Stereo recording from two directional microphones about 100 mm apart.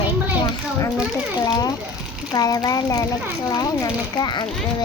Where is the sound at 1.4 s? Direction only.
45° left (ahead or behind).